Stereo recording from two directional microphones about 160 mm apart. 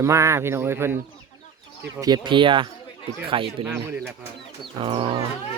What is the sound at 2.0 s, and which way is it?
Speech, 25° right (ahead or behind).